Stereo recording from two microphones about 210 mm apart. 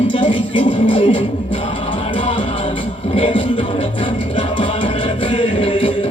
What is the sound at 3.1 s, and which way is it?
Music, 25° left (ahead or behind).